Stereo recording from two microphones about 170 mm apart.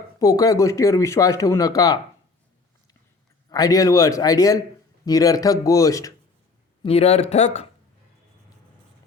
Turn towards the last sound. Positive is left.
turn(degrees=40)  # may be behind; listen again after turning